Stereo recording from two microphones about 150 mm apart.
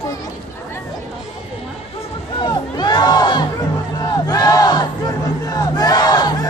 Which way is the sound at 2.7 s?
30° left (ahead or behind).